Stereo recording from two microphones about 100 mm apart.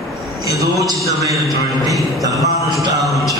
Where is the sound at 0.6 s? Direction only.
35° right (ahead or behind).